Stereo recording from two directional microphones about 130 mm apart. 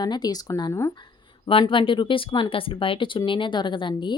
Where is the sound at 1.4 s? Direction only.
40° left (ahead or behind).